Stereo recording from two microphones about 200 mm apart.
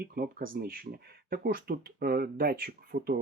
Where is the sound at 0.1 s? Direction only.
45° right (ahead or behind).